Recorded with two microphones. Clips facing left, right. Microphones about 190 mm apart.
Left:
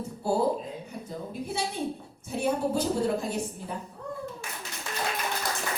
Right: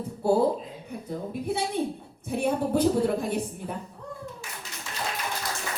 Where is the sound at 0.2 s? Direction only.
60° right (ahead or behind).